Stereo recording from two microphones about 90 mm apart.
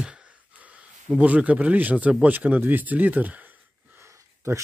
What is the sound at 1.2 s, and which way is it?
Speech, 15° right (ahead or behind).